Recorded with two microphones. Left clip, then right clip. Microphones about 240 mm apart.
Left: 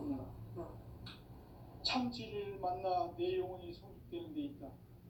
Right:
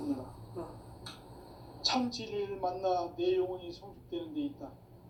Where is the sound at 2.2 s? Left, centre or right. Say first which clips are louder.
Right 7 dB; right.